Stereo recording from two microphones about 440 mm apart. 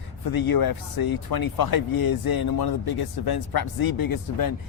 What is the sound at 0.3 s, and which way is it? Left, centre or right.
Speech, left.